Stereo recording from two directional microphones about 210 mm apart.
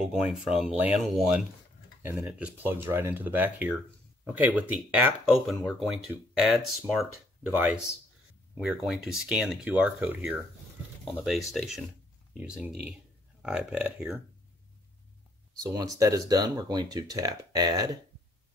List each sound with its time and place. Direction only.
0.0 s speech: 5° right (ahead or behind)
15.6 s speech: 15° right (ahead or behind)